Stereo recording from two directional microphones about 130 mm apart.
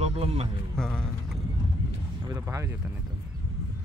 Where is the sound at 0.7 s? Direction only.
5° left (ahead or behind).